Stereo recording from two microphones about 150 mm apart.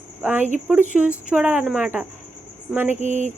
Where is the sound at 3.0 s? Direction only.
50° right (ahead or behind).